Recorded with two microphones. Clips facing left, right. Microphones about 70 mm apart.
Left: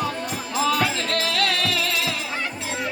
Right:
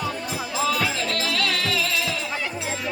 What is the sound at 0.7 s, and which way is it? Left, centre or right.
Music, left.